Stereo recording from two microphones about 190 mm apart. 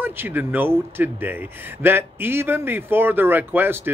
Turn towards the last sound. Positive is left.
turn(degrees=-10)  # may be behind; listen again after turning